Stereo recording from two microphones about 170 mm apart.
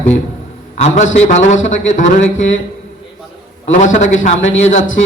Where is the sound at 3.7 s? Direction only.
45° left (ahead or behind).